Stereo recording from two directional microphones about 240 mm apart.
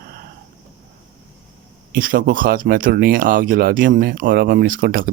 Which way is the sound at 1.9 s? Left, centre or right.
Right.